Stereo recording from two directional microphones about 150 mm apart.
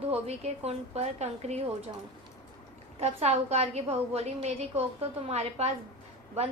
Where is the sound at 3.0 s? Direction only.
45° right (ahead or behind).